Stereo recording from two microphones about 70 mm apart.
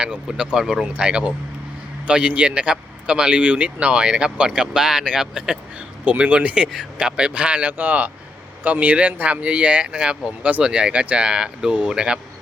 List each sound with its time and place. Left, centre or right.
0.0 s a man's voice: centre